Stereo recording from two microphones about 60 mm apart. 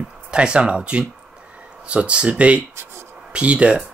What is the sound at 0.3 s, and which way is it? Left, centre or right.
Speech, centre.